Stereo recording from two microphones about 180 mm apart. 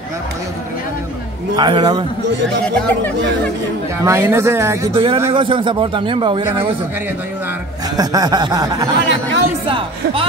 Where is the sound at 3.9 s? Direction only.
15° right (ahead or behind).